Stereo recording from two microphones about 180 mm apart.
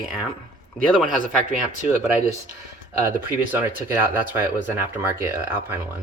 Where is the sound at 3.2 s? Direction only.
15° right (ahead or behind).